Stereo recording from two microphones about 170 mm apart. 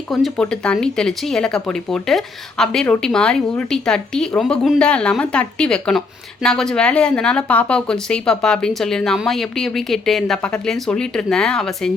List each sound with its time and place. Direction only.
0.1 s speech: centre (ahead or behind)